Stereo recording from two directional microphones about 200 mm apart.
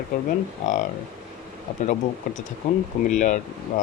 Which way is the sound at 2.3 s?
40° left (ahead or behind).